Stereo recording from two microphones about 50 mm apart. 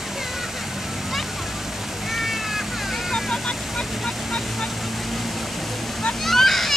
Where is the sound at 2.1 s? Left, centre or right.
Centre.